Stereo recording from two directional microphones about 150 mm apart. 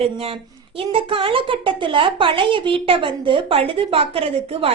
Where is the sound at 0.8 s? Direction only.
35° right (ahead or behind).